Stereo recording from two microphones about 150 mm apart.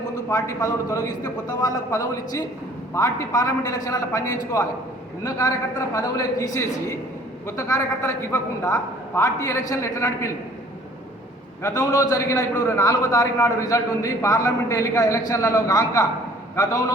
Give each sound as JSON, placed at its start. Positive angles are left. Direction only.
{"t": 0.3, "sound": "a man's voice", "side_deg": 20}
{"t": 5.2, "sound": "a man's voice", "side_deg": 25}
{"t": 11.6, "sound": "a man's voice", "side_deg": 25}